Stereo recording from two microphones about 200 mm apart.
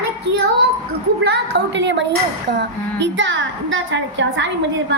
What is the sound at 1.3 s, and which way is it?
A woman's voice, 55° right (ahead or behind).